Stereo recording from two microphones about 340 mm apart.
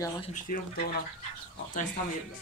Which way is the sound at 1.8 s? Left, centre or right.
Left.